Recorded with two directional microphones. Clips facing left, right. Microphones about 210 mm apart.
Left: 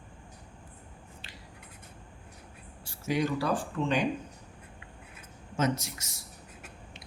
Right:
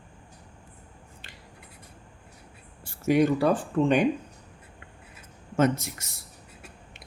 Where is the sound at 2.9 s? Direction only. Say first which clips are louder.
Right 8 dB; 55° right (ahead or behind).